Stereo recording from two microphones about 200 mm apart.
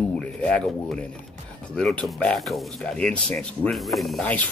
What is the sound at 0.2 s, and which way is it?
Speech, 5° left (ahead or behind).